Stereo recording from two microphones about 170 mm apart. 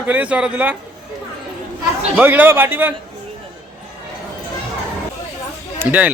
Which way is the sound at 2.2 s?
10° right (ahead or behind).